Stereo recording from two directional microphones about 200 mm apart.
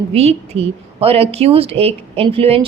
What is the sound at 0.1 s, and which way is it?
Speech, 30° right (ahead or behind).